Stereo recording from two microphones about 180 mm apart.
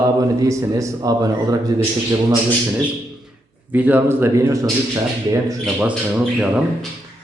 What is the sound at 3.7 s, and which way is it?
Speech, 10° right (ahead or behind).